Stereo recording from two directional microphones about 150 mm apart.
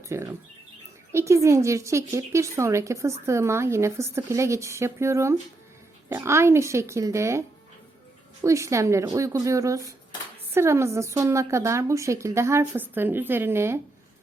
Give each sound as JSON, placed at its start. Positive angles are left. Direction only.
{"t": 0.1, "sound": "a woman's voice", "side_deg": -20}
{"t": 8.4, "sound": "a woman's voice", "side_deg": -20}